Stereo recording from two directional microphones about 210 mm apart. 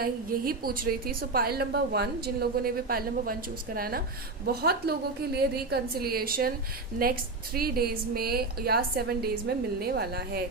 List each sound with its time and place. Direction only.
0.0 s a woman's voice: 45° right (ahead or behind)
7.5 s a woman's voice: 45° right (ahead or behind)